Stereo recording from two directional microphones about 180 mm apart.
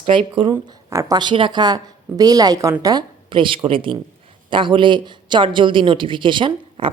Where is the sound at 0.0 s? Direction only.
30° right (ahead or behind).